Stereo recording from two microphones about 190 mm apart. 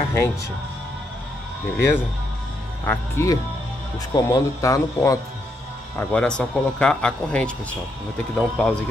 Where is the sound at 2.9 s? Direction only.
15° left (ahead or behind).